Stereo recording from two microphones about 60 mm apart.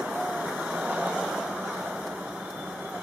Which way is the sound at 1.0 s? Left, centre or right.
Centre.